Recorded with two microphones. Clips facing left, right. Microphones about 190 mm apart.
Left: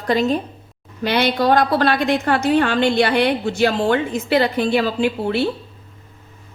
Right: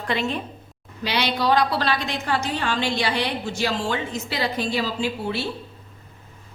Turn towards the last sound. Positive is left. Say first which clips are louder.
# left 7 dB
turn(degrees=60)  # may be behind; listen again after turning